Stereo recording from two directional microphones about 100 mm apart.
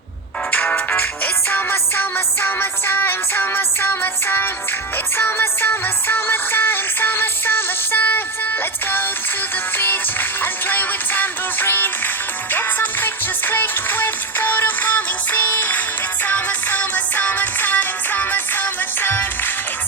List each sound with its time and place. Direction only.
0.5 s music: 15° left (ahead or behind)
9.7 s music: 20° left (ahead or behind)